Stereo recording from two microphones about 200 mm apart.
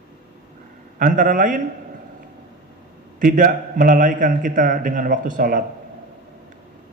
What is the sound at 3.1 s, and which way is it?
A man's voice, 40° right (ahead or behind).